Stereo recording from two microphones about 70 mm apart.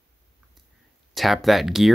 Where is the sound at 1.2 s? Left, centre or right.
Centre.